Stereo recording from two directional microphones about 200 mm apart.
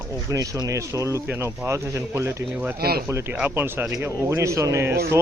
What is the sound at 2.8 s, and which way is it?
Speech, 50° right (ahead or behind).